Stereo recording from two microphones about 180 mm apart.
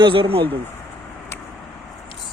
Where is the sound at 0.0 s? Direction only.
30° right (ahead or behind).